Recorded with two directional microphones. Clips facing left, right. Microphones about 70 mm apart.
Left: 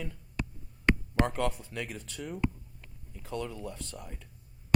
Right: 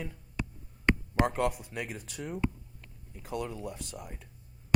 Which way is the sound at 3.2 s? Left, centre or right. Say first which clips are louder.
Right 1 dB; centre.